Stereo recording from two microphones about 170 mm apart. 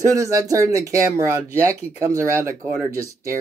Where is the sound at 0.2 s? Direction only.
20° right (ahead or behind).